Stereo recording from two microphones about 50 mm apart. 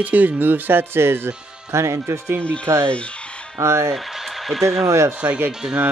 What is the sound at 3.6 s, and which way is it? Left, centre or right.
Speech, right.